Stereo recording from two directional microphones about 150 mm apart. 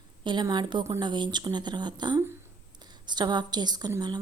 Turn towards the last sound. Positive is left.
turn(degrees=-30)  # may be behind; listen again after turning